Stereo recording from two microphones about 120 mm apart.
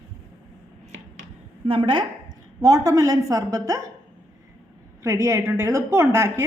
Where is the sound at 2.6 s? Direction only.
30° right (ahead or behind).